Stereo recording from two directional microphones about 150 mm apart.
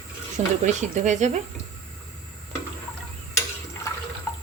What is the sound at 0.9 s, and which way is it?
Speech, 55° right (ahead or behind).